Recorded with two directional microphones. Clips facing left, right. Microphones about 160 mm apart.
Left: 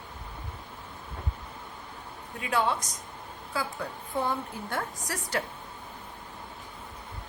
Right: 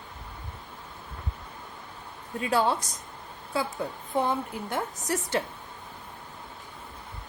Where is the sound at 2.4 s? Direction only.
35° right (ahead or behind).